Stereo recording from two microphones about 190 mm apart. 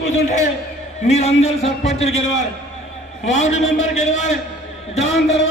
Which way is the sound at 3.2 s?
40° left (ahead or behind).